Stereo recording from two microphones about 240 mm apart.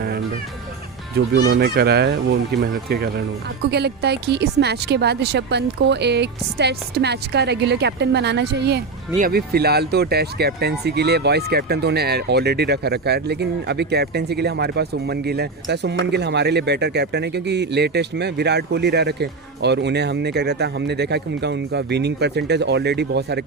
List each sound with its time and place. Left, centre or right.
1.5 s speech: right